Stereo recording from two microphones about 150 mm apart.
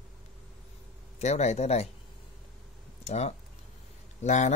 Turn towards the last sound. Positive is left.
turn(degrees=50)  # may be behind; listen again after turning